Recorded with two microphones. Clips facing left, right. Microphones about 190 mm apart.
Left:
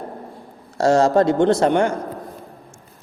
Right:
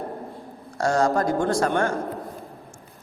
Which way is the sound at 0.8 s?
25° left (ahead or behind).